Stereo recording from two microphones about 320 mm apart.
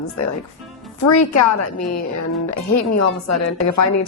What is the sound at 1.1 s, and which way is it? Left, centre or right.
A woman's voice, left.